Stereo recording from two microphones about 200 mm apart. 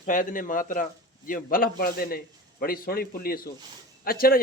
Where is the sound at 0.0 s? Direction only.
40° left (ahead or behind).